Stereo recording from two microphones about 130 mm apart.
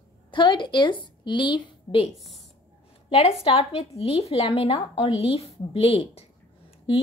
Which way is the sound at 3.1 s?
45° left (ahead or behind).